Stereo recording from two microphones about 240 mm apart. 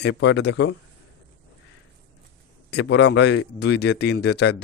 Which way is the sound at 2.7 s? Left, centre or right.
Left.